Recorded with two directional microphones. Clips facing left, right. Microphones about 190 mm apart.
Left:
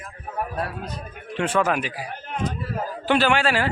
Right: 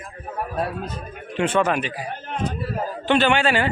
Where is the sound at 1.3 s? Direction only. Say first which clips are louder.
Right 2 dB; centre (ahead or behind).